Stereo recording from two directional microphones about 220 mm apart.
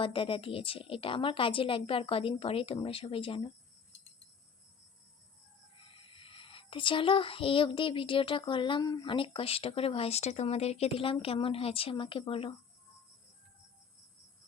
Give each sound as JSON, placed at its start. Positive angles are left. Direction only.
{"t": 0.0, "sound": "speech", "side_deg": 25}
{"t": 5.8, "sound": "speech", "side_deg": 25}